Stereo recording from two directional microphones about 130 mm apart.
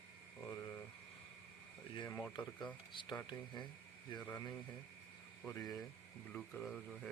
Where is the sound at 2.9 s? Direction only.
40° left (ahead or behind).